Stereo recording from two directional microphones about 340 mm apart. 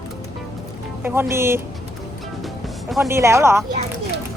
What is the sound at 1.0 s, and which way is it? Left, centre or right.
Speech, centre.